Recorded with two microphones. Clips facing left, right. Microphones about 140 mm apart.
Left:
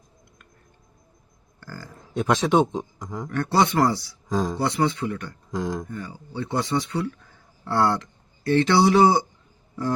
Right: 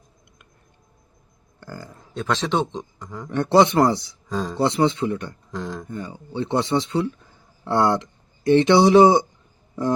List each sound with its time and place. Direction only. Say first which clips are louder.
1.6 s a sound: right 3 dB; 20° right (ahead or behind)
2.1 s speech: left 3 dB; 10° left (ahead or behind)
3.2 s speech: right 5 dB; 20° right (ahead or behind)
4.3 s speech: left 2 dB; 10° left (ahead or behind)
4.6 s speech: right 4 dB; 25° right (ahead or behind)
5.5 s speech: left 4 dB; 10° left (ahead or behind)
5.9 s speech: right 3 dB; 20° right (ahead or behind)